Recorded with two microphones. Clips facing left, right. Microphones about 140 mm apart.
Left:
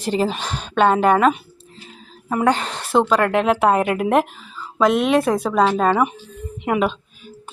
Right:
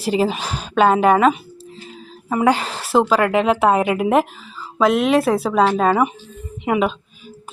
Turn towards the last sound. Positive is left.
turn(degrees=0)  # may be behind; listen again after turning